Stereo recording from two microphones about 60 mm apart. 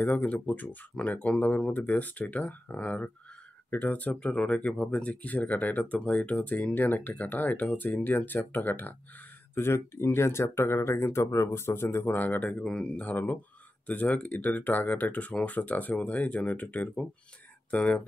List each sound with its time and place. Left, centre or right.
0.2 s speech: left
12.6 s speech: centre